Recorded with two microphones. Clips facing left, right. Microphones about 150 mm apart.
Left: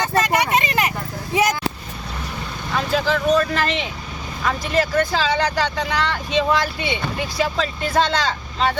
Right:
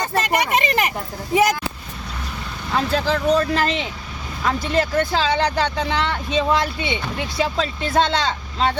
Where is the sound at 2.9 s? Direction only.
30° right (ahead or behind).